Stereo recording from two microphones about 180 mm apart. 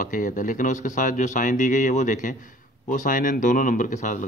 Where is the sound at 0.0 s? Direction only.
45° left (ahead or behind).